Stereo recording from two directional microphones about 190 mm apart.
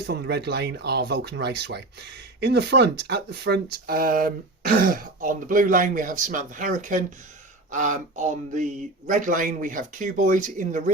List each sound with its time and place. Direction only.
0.1 s speech: 60° right (ahead or behind); by 10.9 s 45° right (ahead or behind)